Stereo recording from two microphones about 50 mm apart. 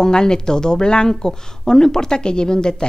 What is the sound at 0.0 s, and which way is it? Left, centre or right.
A woman's voice, centre.